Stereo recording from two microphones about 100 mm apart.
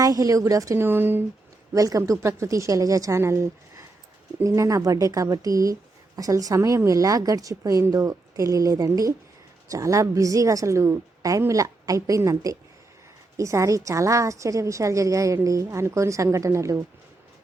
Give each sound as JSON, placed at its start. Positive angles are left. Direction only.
{"t": 0.0, "sound": "a woman's voice", "side_deg": -35}
{"t": 1.7, "sound": "a woman's voice", "side_deg": -35}